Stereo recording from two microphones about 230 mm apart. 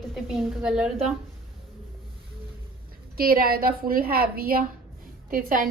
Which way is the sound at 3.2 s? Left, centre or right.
Right.